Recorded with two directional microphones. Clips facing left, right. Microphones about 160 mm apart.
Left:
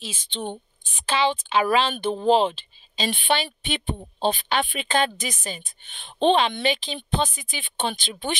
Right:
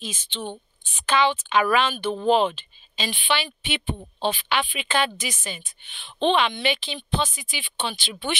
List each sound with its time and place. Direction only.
0.0 s a woman's voice: 35° left (ahead or behind)
3.1 s a woman's voice: 45° left (ahead or behind)